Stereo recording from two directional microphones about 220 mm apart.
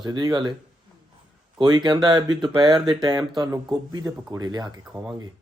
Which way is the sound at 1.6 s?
20° right (ahead or behind).